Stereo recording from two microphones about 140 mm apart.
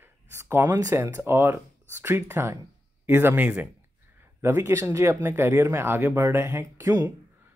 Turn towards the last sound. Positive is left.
turn(degrees=-25)  # may be behind; listen again after turning